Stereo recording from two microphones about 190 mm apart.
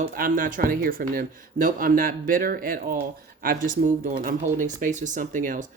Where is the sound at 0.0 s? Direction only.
45° right (ahead or behind).